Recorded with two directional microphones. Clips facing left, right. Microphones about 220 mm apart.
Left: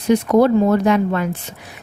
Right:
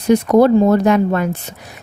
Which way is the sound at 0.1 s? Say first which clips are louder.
Right 3 dB; 40° right (ahead or behind).